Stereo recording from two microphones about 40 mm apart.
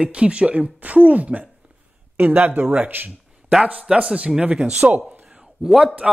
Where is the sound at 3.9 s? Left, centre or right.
Right.